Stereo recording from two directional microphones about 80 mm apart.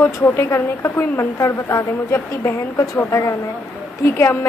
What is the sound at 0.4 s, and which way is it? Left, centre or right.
A woman's voice, left.